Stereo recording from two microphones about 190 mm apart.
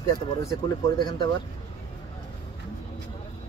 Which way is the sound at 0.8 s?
25° left (ahead or behind).